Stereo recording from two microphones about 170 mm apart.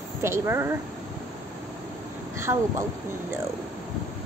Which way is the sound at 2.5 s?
20° right (ahead or behind).